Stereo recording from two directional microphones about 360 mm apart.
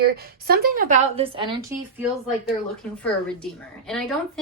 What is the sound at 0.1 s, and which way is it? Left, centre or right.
Speech, right.